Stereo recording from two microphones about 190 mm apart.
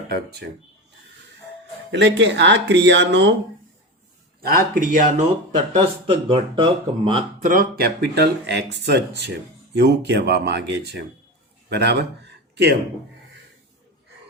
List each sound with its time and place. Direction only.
0.1 s speech: 60° right (ahead or behind)
1.9 s speech: 65° right (ahead or behind)
4.4 s speech: 50° right (ahead or behind)
5.7 s speech: 30° right (ahead or behind)
7.4 s speech: 45° right (ahead or behind); by 12.6 s 65° right (ahead or behind)